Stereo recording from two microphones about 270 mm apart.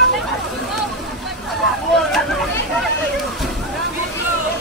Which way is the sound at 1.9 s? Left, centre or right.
Centre.